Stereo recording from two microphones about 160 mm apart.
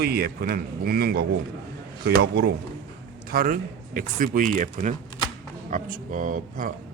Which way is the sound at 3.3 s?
60° right (ahead or behind).